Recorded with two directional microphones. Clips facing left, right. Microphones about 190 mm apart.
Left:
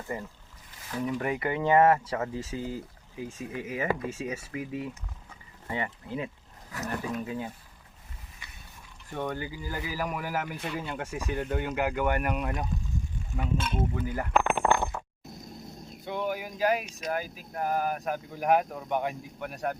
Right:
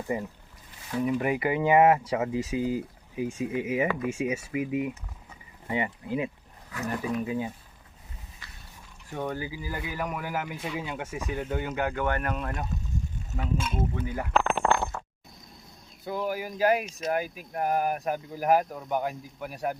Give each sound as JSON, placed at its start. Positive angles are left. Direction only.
{"t": 0.1, "sound": "speech", "side_deg": -15}
{"t": 5.3, "sound": "a sound", "side_deg": -15}
{"t": 6.8, "sound": "speech", "side_deg": 0}
{"t": 9.0, "sound": "speech", "side_deg": -5}
{"t": 13.3, "sound": "speech", "side_deg": 0}
{"t": 14.3, "sound": "a sound", "side_deg": 15}
{"t": 16.0, "sound": "speech", "side_deg": -5}
{"t": 16.6, "sound": "speech", "side_deg": -45}
{"t": 17.8, "sound": "speech", "side_deg": -10}